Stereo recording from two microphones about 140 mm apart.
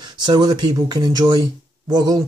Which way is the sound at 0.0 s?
30° right (ahead or behind).